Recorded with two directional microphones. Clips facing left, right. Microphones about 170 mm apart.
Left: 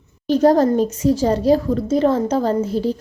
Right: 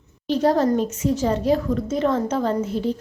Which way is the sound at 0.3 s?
40° left (ahead or behind).